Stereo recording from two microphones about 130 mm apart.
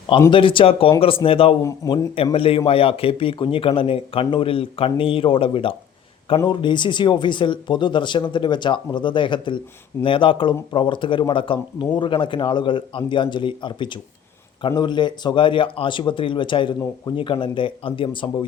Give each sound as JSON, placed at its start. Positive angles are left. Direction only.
{"t": 0.3, "sound": "speech", "side_deg": 40}
{"t": 1.6, "sound": "speech", "side_deg": 25}
{"t": 2.3, "sound": "speech", "side_deg": 45}